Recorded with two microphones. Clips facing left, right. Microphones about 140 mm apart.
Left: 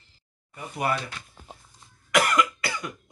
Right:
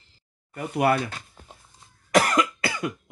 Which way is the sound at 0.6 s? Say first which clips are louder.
Right 6 dB; 55° right (ahead or behind).